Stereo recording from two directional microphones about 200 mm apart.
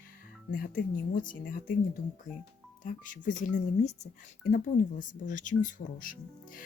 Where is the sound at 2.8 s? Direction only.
40° left (ahead or behind).